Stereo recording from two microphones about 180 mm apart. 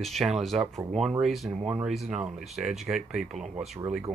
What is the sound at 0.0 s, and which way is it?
Speech, centre (ahead or behind).